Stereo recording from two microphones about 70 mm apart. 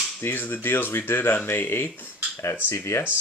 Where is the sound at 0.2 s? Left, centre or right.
Left.